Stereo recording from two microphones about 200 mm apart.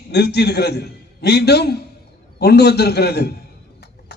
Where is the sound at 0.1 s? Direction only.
55° left (ahead or behind).